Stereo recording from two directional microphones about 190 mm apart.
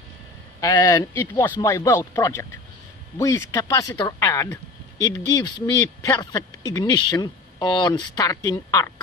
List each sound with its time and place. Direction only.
0.6 s speech: 15° left (ahead or behind)